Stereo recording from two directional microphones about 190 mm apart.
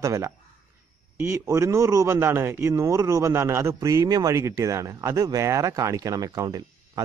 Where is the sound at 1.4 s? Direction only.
15° right (ahead or behind).